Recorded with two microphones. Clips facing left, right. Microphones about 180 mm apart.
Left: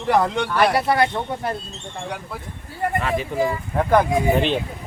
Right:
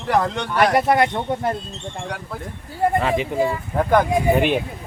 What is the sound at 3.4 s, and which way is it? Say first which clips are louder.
Speech: right 1 dB; centre (ahead or behind).